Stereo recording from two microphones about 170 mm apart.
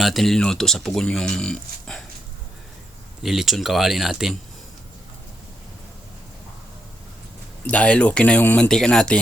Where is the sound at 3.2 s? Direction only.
Centre (ahead or behind).